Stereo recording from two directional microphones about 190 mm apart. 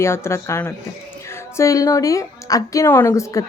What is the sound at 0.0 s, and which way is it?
A woman's voice, 15° left (ahead or behind).